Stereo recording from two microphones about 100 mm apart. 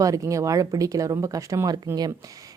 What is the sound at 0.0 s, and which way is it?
Speech, 35° right (ahead or behind).